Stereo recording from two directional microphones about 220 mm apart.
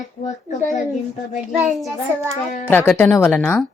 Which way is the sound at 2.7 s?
10° left (ahead or behind).